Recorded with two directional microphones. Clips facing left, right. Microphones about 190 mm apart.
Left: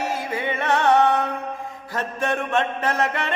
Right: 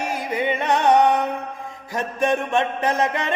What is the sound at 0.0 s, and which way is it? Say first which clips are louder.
Music: right 2 dB; 15° right (ahead or behind).